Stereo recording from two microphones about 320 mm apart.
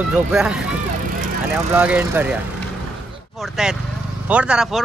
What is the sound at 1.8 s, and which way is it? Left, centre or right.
Speech, centre.